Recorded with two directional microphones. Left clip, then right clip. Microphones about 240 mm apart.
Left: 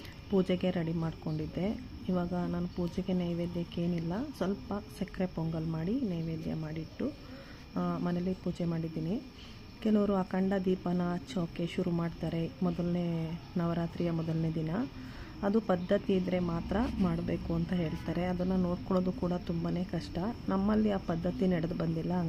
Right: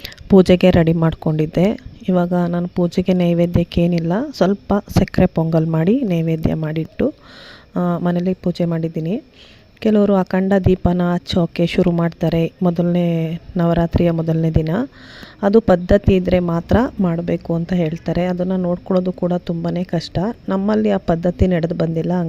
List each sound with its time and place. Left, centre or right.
0.0 s a woman's voice: right